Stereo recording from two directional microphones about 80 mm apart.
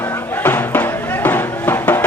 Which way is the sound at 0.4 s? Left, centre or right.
Left.